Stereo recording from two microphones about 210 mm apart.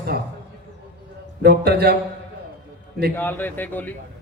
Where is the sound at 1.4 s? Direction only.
50° right (ahead or behind).